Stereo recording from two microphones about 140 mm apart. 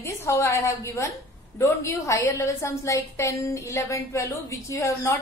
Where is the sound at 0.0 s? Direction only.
20° left (ahead or behind).